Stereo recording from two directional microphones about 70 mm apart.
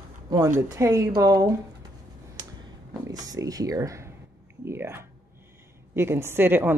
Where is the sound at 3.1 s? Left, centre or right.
Right.